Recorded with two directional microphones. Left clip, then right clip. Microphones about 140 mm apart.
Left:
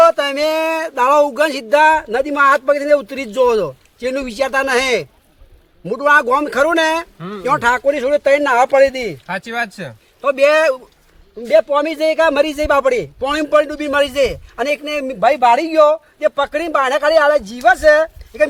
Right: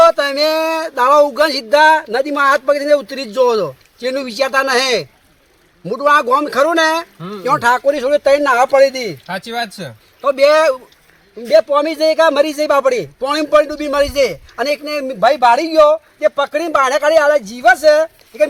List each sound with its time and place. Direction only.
0.0 s a sound: 10° left (ahead or behind)
3.2 s speech: 10° left (ahead or behind)
7.2 s speech: 35° right (ahead or behind)
7.4 s a man's voice: 5° left (ahead or behind)
9.2 s speech: 20° right (ahead or behind)
10.2 s a man's voice: 5° left (ahead or behind)